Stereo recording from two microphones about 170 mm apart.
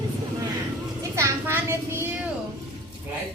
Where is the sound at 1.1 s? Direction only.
15° right (ahead or behind).